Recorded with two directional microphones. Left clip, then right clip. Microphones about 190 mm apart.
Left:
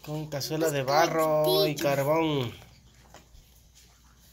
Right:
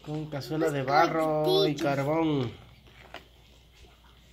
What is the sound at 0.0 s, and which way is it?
Speech, 5° left (ahead or behind).